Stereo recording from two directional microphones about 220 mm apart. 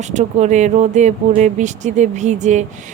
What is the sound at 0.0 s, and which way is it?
Speech, 30° right (ahead or behind).